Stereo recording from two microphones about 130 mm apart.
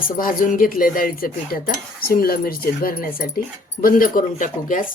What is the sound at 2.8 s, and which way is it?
Speech, 90° left.